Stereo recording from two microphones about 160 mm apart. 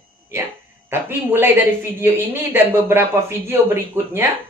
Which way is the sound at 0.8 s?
15° right (ahead or behind).